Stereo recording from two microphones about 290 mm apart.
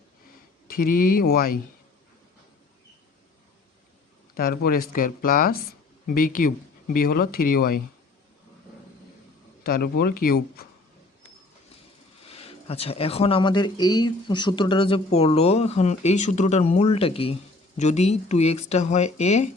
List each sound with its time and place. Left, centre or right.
0.9 s speech: left
4.4 s speech: left
9.6 s speech: left
12.2 s speech: centre